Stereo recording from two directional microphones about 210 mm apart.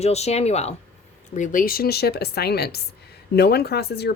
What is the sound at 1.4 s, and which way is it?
A woman's voice, 40° left (ahead or behind).